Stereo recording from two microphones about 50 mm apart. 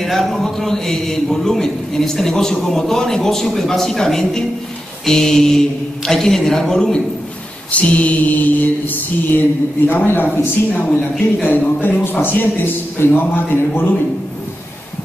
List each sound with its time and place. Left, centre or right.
0.0 s a man's voice: centre
7.7 s a man's voice: left